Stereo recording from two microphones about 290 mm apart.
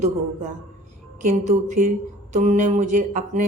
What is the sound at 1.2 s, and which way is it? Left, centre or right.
A woman's voice, right.